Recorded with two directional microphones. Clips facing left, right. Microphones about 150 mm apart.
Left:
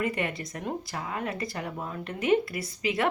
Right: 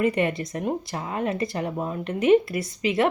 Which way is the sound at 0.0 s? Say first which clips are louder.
Right 7 dB; 20° right (ahead or behind).